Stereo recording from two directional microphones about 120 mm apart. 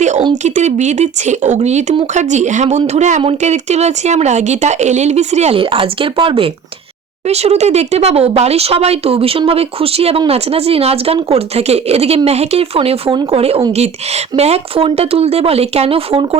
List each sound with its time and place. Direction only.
0.4 s speech: 75° right (ahead or behind)
5.5 s speech: 50° right (ahead or behind)
7.3 s speech: 60° right (ahead or behind)
13.7 s speech: 60° right (ahead or behind)